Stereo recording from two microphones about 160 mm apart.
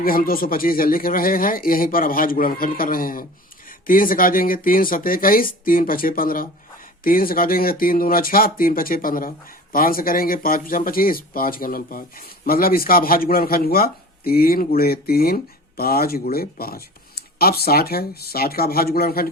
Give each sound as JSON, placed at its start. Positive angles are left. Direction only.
{"t": 0.0, "sound": "speech", "side_deg": 65}